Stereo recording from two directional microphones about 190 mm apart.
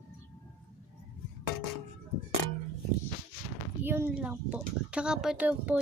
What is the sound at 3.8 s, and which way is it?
Speech, 10° right (ahead or behind).